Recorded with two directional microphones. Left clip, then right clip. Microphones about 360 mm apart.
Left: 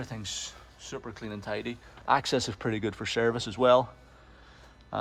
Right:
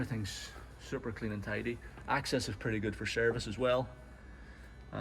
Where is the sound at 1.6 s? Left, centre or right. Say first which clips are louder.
Left 2 dB; left.